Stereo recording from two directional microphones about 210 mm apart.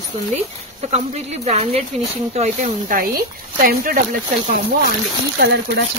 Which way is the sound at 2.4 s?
40° right (ahead or behind).